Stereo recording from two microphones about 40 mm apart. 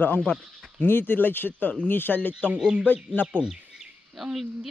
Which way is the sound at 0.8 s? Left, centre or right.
Left.